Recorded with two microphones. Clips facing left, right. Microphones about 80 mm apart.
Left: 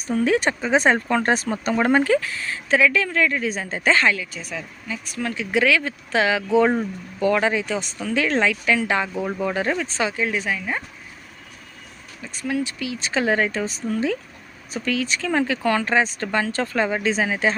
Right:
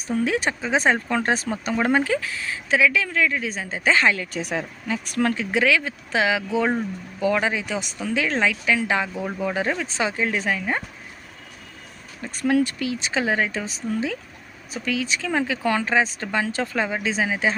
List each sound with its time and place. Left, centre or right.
0.1 s speech: centre
4.3 s speech: right
5.5 s speech: centre
10.0 s speech: right
12.2 s speech: right
13.0 s speech: centre